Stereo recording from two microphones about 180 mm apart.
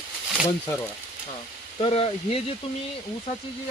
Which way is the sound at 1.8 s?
35° left (ahead or behind).